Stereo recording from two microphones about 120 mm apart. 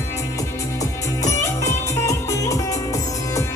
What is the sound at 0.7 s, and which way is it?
Music, 25° left (ahead or behind).